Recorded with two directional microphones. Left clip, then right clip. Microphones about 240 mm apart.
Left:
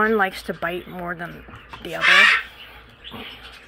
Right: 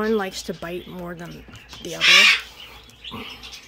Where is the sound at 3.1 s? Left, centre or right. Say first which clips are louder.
Right 1 dB; right.